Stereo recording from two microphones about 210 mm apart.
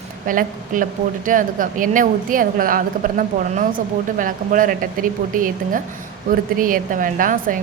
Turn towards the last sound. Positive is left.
turn(degrees=-40)  # may be behind; listen again after turning